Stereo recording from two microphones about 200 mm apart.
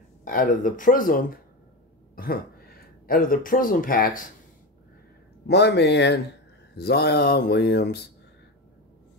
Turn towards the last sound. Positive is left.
turn(degrees=55)  # may be behind; listen again after turning